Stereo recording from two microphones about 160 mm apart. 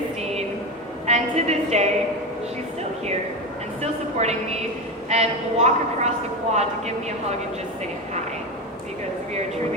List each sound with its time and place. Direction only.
1.0 s a woman's voice: 45° right (ahead or behind)
3.8 s a sound: 40° right (ahead or behind)
5.0 s a woman's voice: 45° right (ahead or behind)